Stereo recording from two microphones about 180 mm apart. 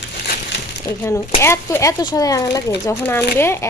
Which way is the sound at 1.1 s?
15° left (ahead or behind).